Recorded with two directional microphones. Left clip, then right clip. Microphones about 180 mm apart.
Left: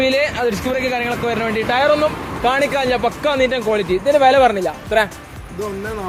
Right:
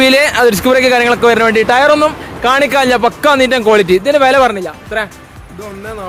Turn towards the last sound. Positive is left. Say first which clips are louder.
# left 1 dB
turn(degrees=5)  # may be behind; listen again after turning